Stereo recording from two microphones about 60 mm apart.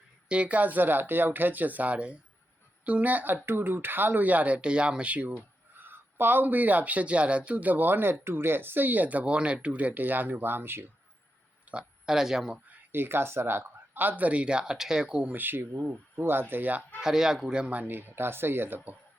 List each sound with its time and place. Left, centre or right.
0.3 s speech: right
5.7 s speech: right
11.7 s a sound: right
12.0 s speech: centre
12.6 s speech: right; by 15.4 s centre
15.4 s speech: right
17.0 s speech: centre
17.7 s speech: right